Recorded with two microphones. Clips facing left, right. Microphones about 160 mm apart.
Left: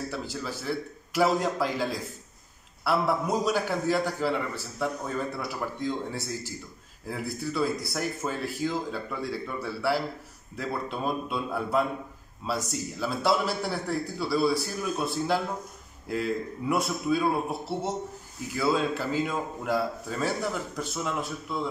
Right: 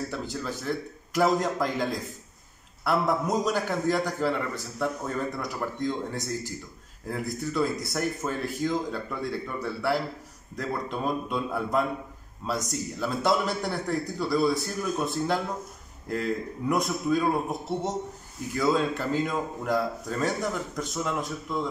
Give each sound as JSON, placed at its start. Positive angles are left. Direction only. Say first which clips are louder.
{"t": 0.1, "sound": "a man's voice", "louder": "right 1 dB", "side_deg": 5}